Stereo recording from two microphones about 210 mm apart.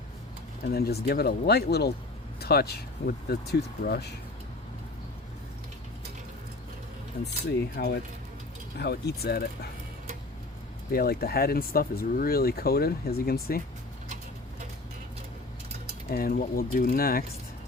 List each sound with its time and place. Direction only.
0.7 s speech: 50° left (ahead or behind)
7.8 s speech: 55° left (ahead or behind)
10.9 s speech: 45° left (ahead or behind)
16.0 s speech: 45° left (ahead or behind)